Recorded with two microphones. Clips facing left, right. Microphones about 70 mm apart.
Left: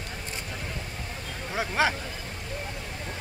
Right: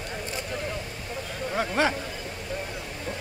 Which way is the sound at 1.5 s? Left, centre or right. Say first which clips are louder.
Right 1 dB; centre.